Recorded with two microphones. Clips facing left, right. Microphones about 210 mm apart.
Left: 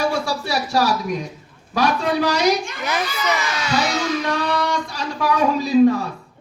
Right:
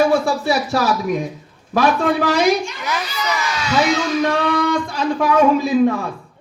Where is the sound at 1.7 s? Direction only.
50° right (ahead or behind).